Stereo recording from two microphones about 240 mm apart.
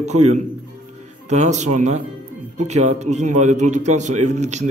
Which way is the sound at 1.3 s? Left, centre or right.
Right.